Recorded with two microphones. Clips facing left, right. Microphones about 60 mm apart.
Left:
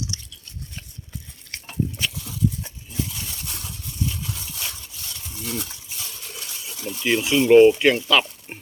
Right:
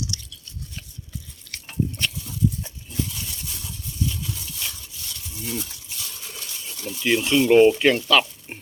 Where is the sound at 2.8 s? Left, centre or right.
Centre.